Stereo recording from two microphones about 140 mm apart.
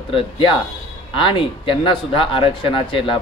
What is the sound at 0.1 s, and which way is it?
Speech, 35° left (ahead or behind).